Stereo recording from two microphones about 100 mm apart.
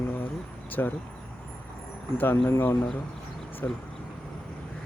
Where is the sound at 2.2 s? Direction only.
20° left (ahead or behind).